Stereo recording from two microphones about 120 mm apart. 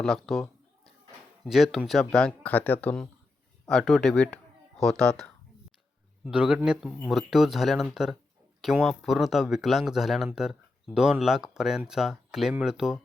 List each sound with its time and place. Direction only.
0.0 s a sound: centre (ahead or behind)
1.5 s speech: centre (ahead or behind); by 2.9 s 15° left (ahead or behind)
3.7 s speech: 5° left (ahead or behind)
6.2 s speech: 10° right (ahead or behind)